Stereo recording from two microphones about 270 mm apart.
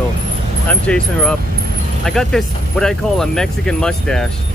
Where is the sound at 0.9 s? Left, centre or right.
Centre.